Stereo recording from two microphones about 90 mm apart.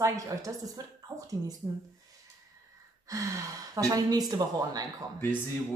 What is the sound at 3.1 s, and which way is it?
A woman's voice, 35° right (ahead or behind).